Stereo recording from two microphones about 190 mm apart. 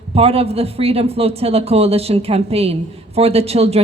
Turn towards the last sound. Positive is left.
turn(degrees=-30)  # may be behind; listen again after turning